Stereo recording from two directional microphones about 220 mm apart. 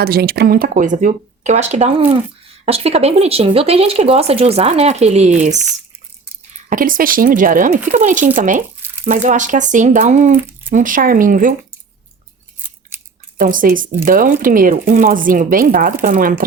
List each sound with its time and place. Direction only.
0.0 s speech: 45° right (ahead or behind)
6.7 s speech: 40° right (ahead or behind)
13.3 s speech: 40° right (ahead or behind)